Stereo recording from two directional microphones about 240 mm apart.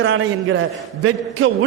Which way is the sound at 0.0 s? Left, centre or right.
Right.